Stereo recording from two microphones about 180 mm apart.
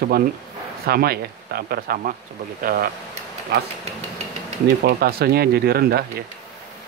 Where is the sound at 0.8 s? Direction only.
60° right (ahead or behind).